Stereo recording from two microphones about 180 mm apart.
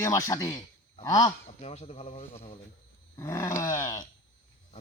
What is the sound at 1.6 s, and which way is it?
Speech, 35° left (ahead or behind).